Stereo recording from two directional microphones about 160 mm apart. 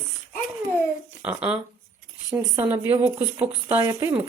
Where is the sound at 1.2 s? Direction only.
10° right (ahead or behind).